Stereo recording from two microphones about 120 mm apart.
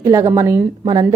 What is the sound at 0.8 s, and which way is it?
Speech, 35° right (ahead or behind).